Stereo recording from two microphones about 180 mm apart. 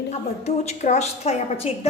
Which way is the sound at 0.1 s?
40° left (ahead or behind).